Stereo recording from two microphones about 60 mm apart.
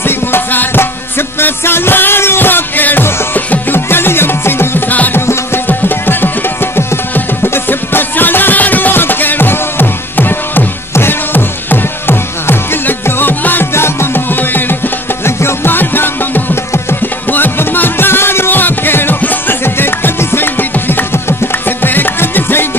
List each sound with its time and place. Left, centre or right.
0.0 s music: left